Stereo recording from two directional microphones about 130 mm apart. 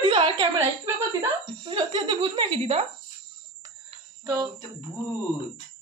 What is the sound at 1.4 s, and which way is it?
Speech, 40° right (ahead or behind).